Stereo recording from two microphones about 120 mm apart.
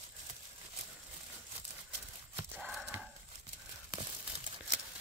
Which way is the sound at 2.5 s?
Centre (ahead or behind).